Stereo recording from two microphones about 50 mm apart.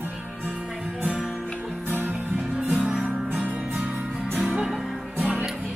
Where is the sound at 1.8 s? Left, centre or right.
Right.